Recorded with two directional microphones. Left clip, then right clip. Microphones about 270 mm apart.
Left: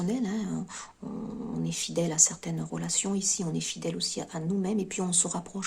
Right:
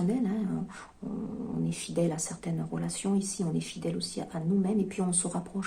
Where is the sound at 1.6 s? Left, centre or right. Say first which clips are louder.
Even; left.